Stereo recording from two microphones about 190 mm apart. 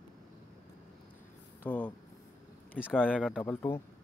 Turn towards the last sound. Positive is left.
turn(degrees=10)  # may be behind; listen again after turning